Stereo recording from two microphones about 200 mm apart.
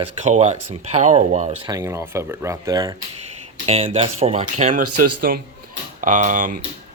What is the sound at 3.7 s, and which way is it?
Speech, 30° right (ahead or behind).